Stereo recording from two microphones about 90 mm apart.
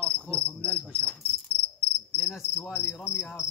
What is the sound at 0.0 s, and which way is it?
Cricket, 25° right (ahead or behind).